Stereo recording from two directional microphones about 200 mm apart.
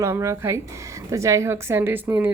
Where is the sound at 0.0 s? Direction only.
15° right (ahead or behind).